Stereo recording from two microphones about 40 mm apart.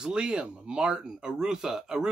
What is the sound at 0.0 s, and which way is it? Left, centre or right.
Speech, right.